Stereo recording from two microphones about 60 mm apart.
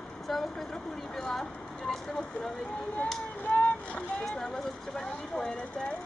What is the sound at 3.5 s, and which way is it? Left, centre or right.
Boat, centre.